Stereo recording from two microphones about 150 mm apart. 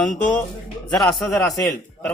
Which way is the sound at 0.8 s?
5° left (ahead or behind).